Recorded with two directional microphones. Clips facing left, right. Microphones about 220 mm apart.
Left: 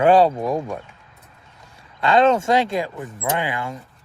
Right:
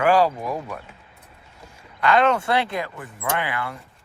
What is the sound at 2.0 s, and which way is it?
Speech, 25° left (ahead or behind).